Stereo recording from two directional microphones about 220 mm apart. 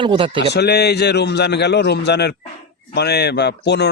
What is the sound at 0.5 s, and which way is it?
A man's voice, 50° left (ahead or behind).